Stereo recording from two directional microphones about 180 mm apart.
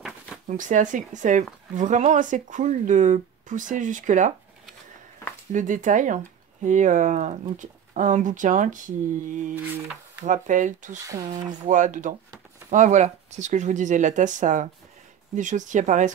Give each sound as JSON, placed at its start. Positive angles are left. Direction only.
{"t": 0.5, "sound": "a woman's voice", "side_deg": -45}
{"t": 5.5, "sound": "a woman's voice", "side_deg": -45}